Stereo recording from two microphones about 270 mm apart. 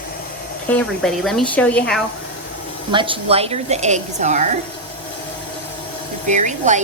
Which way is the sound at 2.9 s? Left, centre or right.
Centre.